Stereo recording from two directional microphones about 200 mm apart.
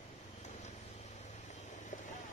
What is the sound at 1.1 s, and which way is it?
Vehicle, 35° left (ahead or behind).